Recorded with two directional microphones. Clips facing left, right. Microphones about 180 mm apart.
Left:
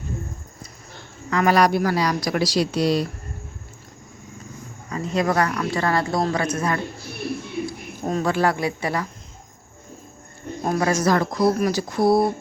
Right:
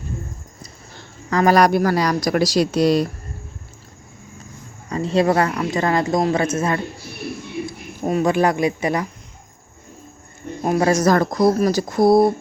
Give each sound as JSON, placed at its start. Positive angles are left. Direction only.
{"t": 1.3, "sound": "a woman's voice", "side_deg": -40}
{"t": 4.9, "sound": "speech", "side_deg": -30}
{"t": 8.0, "sound": "speech", "side_deg": -15}
{"t": 10.8, "sound": "speech", "side_deg": -35}